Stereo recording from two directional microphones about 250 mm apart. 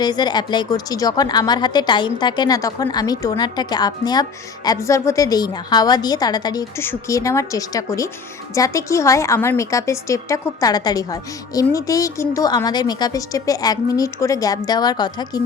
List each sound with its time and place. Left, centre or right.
0.0 s speech: centre